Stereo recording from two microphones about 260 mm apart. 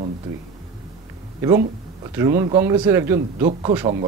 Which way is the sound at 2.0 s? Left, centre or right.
Centre.